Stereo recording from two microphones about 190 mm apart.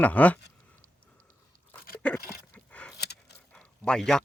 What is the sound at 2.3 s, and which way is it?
Dog, 10° left (ahead or behind).